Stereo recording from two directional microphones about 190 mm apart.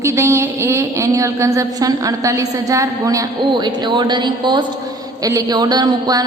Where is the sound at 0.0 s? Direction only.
15° right (ahead or behind).